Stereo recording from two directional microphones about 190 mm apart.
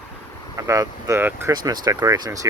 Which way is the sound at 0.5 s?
15° right (ahead or behind).